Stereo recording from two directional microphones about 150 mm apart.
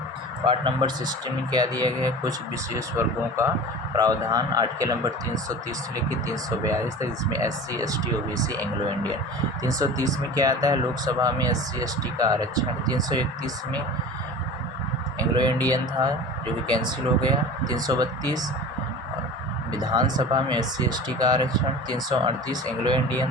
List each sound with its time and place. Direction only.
0.4 s speech: 35° right (ahead or behind)
9.6 s speech: 25° right (ahead or behind)
15.2 s speech: 25° right (ahead or behind)
19.7 s speech: 30° right (ahead or behind)
22.8 s speech: 30° right (ahead or behind)